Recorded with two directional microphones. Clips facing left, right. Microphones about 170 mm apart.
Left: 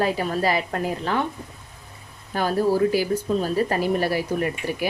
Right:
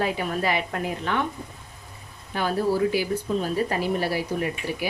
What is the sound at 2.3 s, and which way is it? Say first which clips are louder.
A woman's voice: left 3 dB; 40° left (ahead or behind).